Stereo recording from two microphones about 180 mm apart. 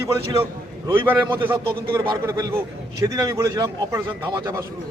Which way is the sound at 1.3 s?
30° right (ahead or behind).